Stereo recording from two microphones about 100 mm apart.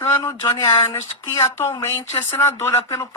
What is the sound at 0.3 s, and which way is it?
Speech, 30° left (ahead or behind).